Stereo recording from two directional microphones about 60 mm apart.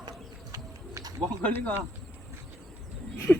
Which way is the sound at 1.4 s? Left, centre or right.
Left.